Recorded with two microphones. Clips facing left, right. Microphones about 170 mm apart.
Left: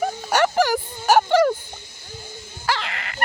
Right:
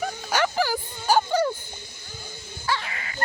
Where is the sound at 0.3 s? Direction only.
65° left (ahead or behind); by 1.5 s 90° left.